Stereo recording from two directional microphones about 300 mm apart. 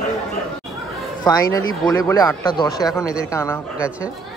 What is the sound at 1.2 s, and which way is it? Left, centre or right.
A man's voice, centre.